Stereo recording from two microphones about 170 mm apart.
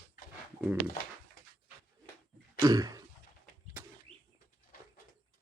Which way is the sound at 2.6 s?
20° right (ahead or behind).